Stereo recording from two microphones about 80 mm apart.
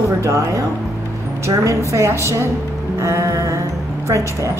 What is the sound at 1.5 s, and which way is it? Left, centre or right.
A woman's voice, right.